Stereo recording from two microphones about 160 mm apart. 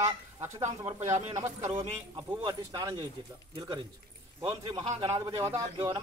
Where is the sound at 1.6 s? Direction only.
40° right (ahead or behind).